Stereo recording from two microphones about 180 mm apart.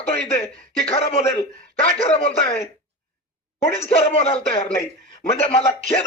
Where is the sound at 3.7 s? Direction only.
35° left (ahead or behind).